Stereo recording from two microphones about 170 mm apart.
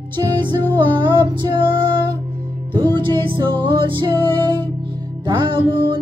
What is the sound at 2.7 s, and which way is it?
Music, 30° right (ahead or behind).